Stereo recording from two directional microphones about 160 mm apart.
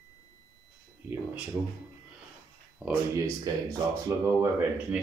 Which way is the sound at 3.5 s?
20° right (ahead or behind).